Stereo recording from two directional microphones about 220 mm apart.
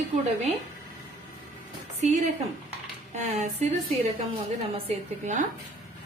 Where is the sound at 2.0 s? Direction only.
30° right (ahead or behind).